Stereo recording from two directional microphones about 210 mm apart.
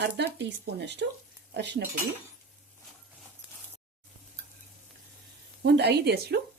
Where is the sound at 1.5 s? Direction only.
55° right (ahead or behind).